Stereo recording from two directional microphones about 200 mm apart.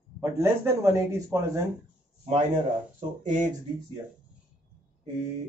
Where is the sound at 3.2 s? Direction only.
40° right (ahead or behind).